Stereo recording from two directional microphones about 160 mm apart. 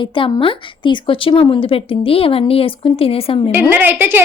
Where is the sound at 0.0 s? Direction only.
30° left (ahead or behind).